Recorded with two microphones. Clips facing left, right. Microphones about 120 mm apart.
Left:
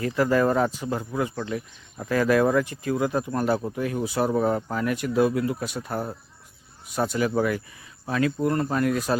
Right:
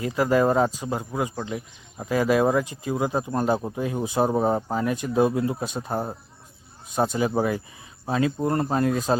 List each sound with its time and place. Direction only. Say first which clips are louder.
0.0 s speech: right 1 dB; 15° right (ahead or behind)